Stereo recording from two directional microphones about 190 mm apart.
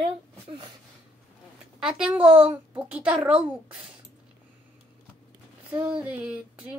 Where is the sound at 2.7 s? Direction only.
5° right (ahead or behind).